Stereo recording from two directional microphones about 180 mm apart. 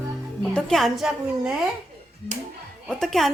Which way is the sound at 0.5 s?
Centre (ahead or behind).